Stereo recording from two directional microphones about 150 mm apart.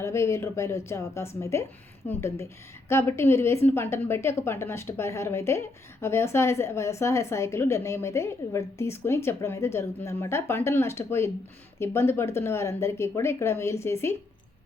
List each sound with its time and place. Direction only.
0.0 s a woman's voice: 20° left (ahead or behind)